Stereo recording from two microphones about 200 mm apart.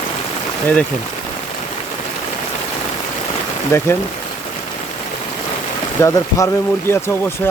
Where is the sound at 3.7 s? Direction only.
10° left (ahead or behind).